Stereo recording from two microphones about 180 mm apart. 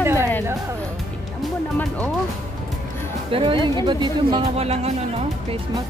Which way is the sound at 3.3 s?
30° right (ahead or behind).